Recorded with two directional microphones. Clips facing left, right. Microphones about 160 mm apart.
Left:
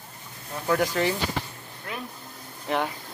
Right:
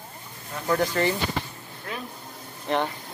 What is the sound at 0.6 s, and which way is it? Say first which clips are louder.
Speech: even; 5° left (ahead or behind).